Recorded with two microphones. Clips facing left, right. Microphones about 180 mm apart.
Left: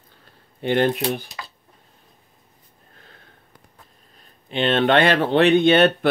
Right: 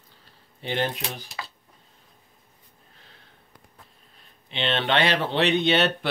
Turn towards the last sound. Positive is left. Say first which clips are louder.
# left 7 dB
turn(degrees=50)  # may be behind; listen again after turning